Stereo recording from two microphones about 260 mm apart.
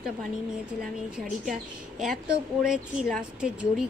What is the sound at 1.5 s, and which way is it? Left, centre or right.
Speech, centre.